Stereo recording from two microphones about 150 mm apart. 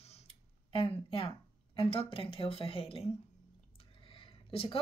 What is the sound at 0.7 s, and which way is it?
A woman's voice, 35° left (ahead or behind).